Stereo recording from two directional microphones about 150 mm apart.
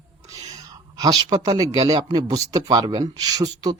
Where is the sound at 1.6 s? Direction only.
25° right (ahead or behind).